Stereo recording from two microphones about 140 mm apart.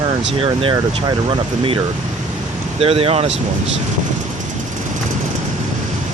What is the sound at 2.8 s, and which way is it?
Speech, 45° right (ahead or behind).